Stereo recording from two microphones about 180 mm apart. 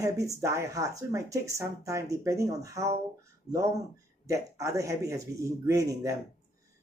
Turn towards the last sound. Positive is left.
turn(degrees=-20)  # may be behind; listen again after turning